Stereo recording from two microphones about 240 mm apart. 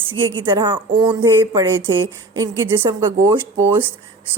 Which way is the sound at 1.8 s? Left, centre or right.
Right.